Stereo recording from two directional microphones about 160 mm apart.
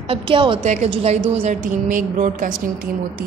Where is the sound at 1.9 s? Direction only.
60° right (ahead or behind).